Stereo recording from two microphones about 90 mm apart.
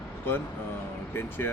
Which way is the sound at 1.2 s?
25° left (ahead or behind).